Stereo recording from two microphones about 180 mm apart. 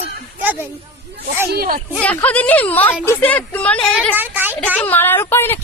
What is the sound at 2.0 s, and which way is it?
A woman's voice, 10° left (ahead or behind).